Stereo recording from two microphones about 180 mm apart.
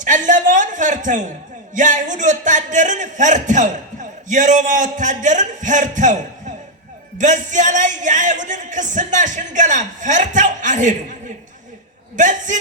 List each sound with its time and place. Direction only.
0.0 s a sound: 45° right (ahead or behind)
1.7 s speech: 45° right (ahead or behind)
12.1 s speech: 45° right (ahead or behind)